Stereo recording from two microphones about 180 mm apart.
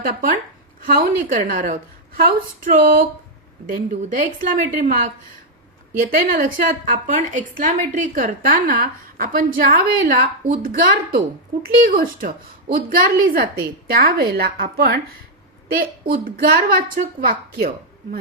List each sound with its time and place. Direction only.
0.0 s a woman's voice: 55° right (ahead or behind)
6.0 s a woman's voice: 50° right (ahead or behind)